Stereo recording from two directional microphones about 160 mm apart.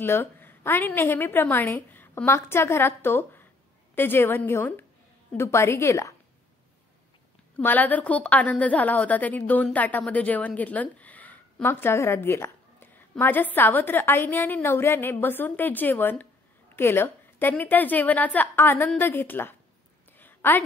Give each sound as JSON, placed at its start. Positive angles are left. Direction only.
{"t": 0.0, "sound": "a woman's voice", "side_deg": 15}
{"t": 7.5, "sound": "a woman's voice", "side_deg": 10}
{"t": 20.2, "sound": "a sound", "side_deg": 10}